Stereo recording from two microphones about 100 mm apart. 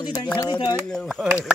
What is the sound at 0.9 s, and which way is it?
Speech, 5° left (ahead or behind).